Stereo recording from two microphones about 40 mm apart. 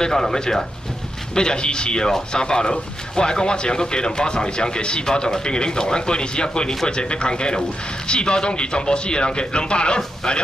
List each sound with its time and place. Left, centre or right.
0.0 s speech: centre